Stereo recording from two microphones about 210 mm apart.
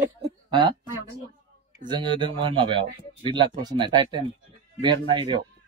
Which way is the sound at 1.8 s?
20° right (ahead or behind).